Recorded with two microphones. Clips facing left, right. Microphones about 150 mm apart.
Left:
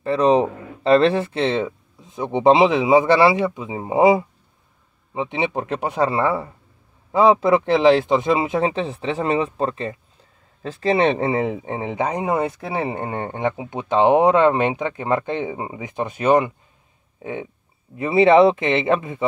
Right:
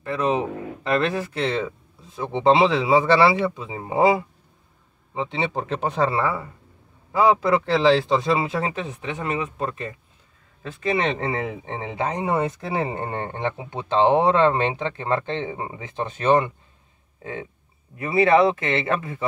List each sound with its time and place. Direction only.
0.0 s speech: 30° left (ahead or behind)
11.9 s speech: 15° left (ahead or behind)